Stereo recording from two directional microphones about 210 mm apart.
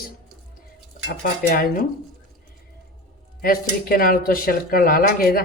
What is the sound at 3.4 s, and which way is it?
Speech, 45° left (ahead or behind).